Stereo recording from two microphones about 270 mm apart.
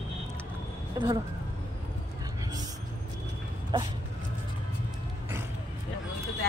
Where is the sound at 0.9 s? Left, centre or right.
Centre.